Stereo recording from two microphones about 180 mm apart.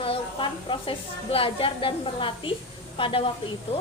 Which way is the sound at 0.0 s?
30° left (ahead or behind).